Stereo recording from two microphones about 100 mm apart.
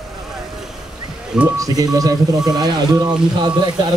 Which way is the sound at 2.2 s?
5° right (ahead or behind).